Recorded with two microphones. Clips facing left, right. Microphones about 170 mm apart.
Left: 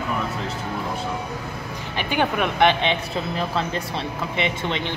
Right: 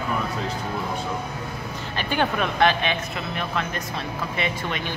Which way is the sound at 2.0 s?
15° left (ahead or behind).